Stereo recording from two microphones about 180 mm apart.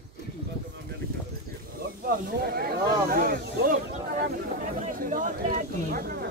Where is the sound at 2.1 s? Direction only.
55° right (ahead or behind).